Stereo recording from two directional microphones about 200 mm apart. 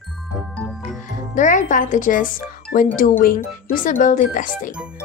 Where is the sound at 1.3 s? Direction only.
40° left (ahead or behind).